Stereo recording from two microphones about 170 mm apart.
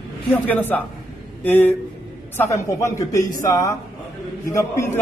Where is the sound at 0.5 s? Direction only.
10° left (ahead or behind).